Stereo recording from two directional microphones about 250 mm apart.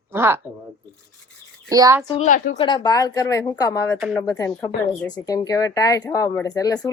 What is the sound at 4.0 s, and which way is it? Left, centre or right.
Speech, centre.